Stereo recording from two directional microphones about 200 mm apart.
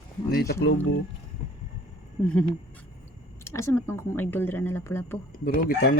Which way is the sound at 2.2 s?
Centre (ahead or behind).